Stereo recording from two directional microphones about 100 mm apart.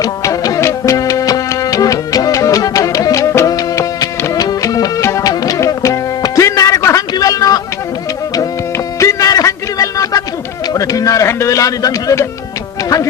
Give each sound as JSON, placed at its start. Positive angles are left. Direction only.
{"t": 0.0, "sound": "music", "side_deg": 35}
{"t": 9.0, "sound": "music", "side_deg": 35}
{"t": 10.8, "sound": "a sound", "side_deg": 35}